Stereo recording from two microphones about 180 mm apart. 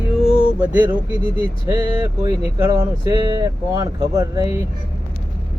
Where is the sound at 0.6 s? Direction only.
10° right (ahead or behind).